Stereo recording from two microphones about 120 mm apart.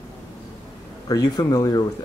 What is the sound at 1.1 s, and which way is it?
Speech, 30° left (ahead or behind).